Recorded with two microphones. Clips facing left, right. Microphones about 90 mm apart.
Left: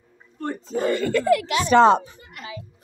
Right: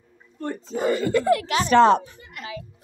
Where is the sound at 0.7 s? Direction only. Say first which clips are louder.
Even; 15° right (ahead or behind).